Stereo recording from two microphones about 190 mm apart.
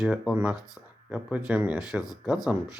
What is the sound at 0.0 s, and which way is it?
Speech, 5° right (ahead or behind).